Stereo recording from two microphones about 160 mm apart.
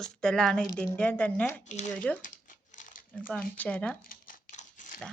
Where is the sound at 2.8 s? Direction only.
60° left (ahead or behind).